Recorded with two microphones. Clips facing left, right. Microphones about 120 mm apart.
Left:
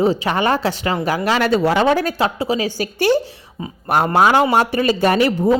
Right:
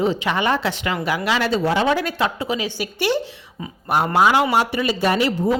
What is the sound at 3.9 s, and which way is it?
Speech, 55° left (ahead or behind).